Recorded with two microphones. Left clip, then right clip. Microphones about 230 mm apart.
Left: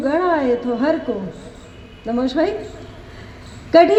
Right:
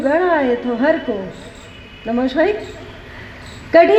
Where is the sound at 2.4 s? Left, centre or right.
Left.